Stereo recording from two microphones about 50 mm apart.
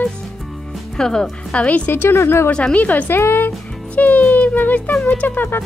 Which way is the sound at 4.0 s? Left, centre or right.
Left.